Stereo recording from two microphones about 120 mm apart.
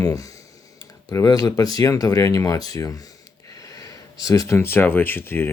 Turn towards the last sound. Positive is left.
turn(degrees=20)  # may be behind; listen again after turning